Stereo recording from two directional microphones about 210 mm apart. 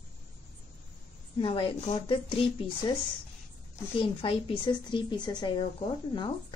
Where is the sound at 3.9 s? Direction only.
25° left (ahead or behind).